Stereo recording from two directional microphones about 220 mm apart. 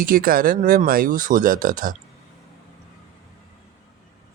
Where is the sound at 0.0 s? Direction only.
40° right (ahead or behind).